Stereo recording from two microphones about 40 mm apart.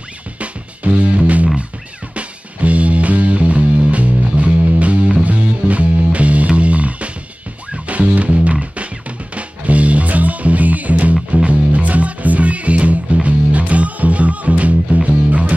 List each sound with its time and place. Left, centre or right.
0.4 s music: right